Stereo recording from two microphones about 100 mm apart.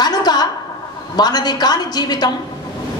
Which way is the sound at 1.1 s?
45° left (ahead or behind).